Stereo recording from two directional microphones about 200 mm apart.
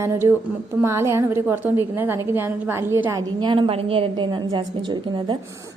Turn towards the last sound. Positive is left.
turn(degrees=-20)  # may be behind; listen again after turning